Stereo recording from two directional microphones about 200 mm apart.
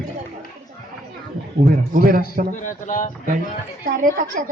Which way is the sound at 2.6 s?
40° left (ahead or behind).